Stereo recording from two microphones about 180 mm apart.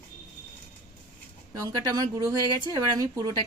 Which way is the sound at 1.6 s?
20° right (ahead or behind).